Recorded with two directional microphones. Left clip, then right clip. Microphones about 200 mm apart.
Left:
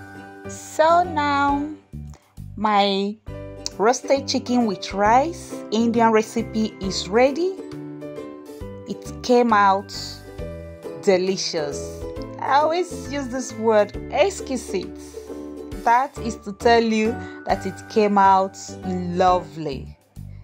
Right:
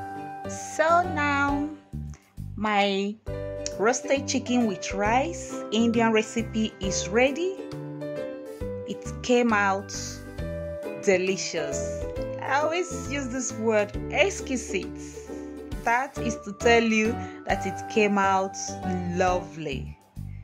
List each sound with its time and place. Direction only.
0.7 s speech: 20° left (ahead or behind)
2.6 s speech: 20° left (ahead or behind)
8.8 s music: 20° left (ahead or behind)
11.1 s speech: 15° left (ahead or behind)
12.0 s music: centre (ahead or behind)
12.4 s speech: 20° left (ahead or behind)
15.8 s a child's voice: 15° left (ahead or behind)
16.2 s speech: 5° right (ahead or behind)
16.6 s speech: 20° left (ahead or behind)